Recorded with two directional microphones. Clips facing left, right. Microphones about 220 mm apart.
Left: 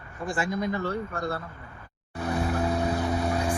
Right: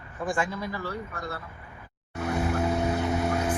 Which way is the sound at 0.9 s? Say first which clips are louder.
Left 5 dB; 50° left (ahead or behind).